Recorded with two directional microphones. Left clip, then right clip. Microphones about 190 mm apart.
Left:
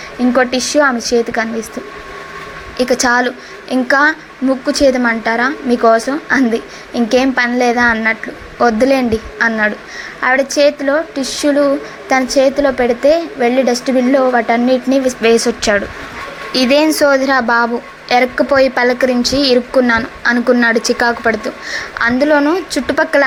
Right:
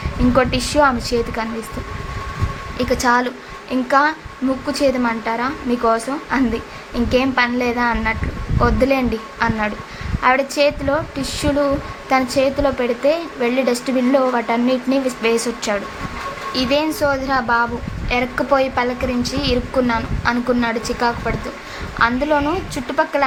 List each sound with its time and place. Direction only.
0.3 s a woman's voice: 15° left (ahead or behind)
2.7 s a woman's voice: 20° left (ahead or behind)
16.5 s a woman's voice: 35° left (ahead or behind)